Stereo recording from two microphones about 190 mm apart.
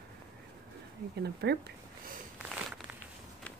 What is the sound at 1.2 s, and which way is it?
Speech, 60° right (ahead or behind).